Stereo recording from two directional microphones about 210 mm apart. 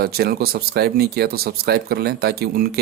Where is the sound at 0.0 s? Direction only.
45° right (ahead or behind).